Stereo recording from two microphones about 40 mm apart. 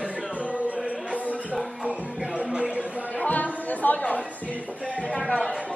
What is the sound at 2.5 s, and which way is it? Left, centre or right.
Music, right.